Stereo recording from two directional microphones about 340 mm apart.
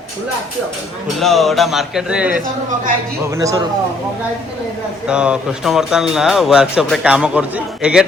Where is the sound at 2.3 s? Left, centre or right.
Right.